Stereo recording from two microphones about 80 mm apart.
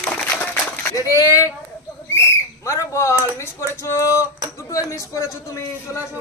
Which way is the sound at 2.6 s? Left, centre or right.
Left.